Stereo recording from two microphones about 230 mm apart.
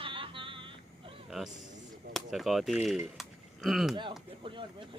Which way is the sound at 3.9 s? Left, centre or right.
Centre.